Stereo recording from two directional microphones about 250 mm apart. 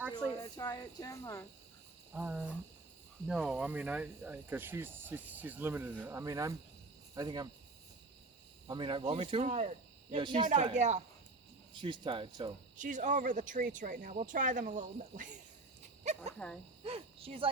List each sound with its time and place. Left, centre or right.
0.4 s speech: centre
2.1 s speech: centre
8.6 s speech: centre
12.7 s speech: right
16.4 s speech: centre
16.8 s speech: right